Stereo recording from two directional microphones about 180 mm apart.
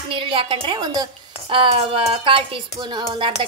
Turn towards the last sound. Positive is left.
turn(degrees=-25)  # may be behind; listen again after turning